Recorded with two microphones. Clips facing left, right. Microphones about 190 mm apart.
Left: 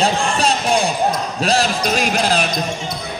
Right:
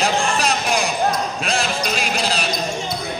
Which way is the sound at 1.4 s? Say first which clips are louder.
Left 5 dB; 40° left (ahead or behind).